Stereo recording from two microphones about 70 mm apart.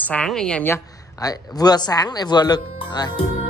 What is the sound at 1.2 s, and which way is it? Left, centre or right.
Speech, left.